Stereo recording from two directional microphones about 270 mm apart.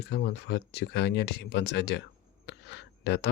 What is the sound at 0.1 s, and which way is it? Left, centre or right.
Speech, left.